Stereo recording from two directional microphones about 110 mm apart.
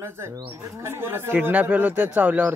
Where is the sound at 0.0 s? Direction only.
25° right (ahead or behind).